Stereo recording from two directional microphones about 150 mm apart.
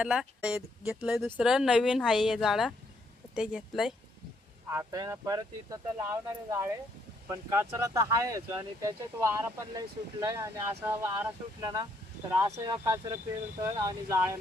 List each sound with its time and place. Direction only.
0.0 s speech: 5° right (ahead or behind)
4.7 s speech: 20° right (ahead or behind)